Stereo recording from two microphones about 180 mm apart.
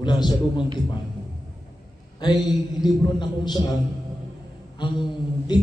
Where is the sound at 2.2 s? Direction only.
20° left (ahead or behind).